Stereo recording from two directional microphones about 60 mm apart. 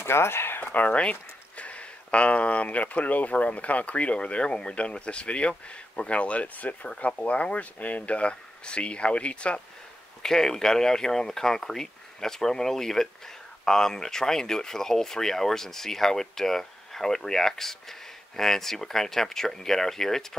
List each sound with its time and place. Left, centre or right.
0.0 s speech: left
0.7 s speech: left; by 20.2 s centre